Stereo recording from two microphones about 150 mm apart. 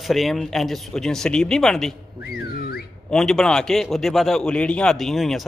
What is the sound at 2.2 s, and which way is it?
Whistling, 90° left.